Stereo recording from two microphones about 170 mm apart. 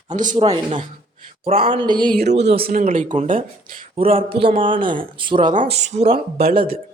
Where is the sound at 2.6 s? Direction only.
55° right (ahead or behind).